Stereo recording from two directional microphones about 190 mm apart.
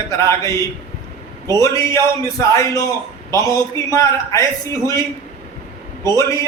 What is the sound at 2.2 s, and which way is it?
A man's voice, 15° left (ahead or behind).